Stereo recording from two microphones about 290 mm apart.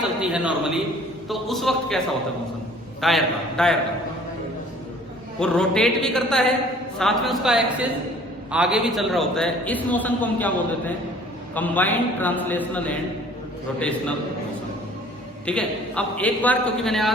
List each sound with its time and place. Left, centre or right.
0.2 s a man's voice: centre
3.0 s a man's voice: centre
5.4 s a man's voice: centre
15.4 s a man's voice: centre